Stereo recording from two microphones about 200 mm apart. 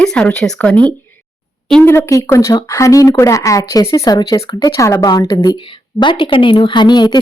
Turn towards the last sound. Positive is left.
turn(degrees=20)  # may be behind; listen again after turning